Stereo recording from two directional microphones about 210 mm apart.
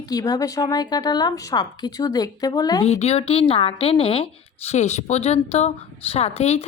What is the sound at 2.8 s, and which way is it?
A woman's voice, 30° left (ahead or behind).